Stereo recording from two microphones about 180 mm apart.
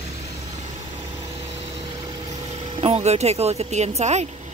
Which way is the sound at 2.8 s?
35° right (ahead or behind).